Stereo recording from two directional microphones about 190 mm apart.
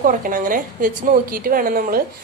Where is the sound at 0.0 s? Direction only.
45° right (ahead or behind).